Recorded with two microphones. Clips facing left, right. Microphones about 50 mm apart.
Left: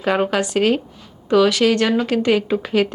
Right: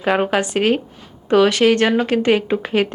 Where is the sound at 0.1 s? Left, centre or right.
Centre.